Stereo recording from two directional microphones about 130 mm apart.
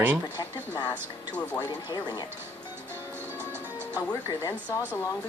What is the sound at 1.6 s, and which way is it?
Speech, 35° left (ahead or behind).